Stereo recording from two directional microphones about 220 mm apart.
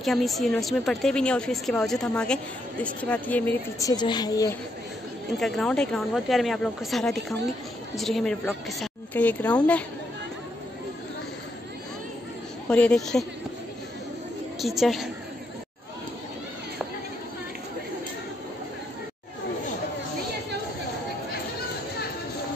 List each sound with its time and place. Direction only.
0.0 s a woman's voice: centre (ahead or behind)
3.9 s a woman's voice: 20° left (ahead or behind)
5.4 s a woman's voice: 5° left (ahead or behind)
12.6 s a woman's voice: 5° left (ahead or behind)
14.6 s a woman's voice: centre (ahead or behind)